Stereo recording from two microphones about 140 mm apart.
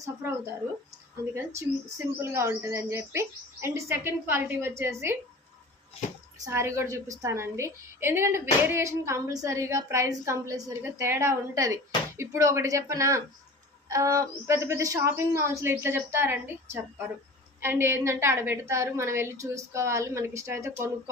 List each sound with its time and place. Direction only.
1.2 s a woman's voice: 20° right (ahead or behind)
6.4 s a woman's voice: 20° right (ahead or behind)